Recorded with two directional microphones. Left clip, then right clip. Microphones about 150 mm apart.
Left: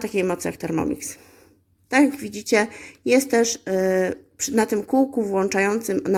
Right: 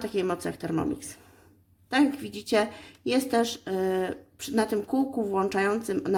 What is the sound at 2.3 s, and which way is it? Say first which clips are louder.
Speech: left 5 dB; 35° left (ahead or behind).